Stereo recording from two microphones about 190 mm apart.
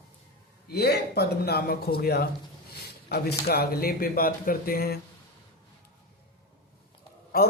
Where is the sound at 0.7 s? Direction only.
55° left (ahead or behind).